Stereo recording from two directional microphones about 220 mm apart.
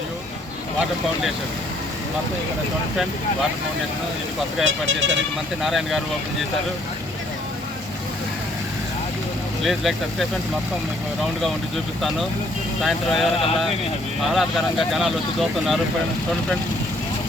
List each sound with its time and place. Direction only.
4.6 s speech: 60° right (ahead or behind)
5.6 s speech: centre (ahead or behind)
9.6 s speech: centre (ahead or behind)
12.8 s speech: centre (ahead or behind)